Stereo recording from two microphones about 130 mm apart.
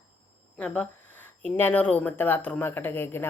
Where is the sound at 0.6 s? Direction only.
10° left (ahead or behind).